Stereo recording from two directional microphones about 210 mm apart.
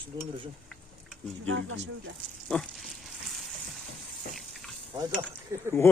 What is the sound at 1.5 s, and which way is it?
Speech, 70° right (ahead or behind).